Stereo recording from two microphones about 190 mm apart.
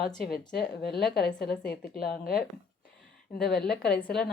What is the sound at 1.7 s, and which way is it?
Speech, 50° left (ahead or behind).